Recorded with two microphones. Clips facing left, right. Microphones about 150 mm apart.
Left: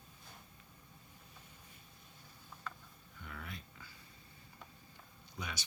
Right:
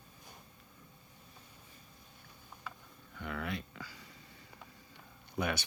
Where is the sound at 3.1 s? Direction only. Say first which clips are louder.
Right 10 dB; 90° right.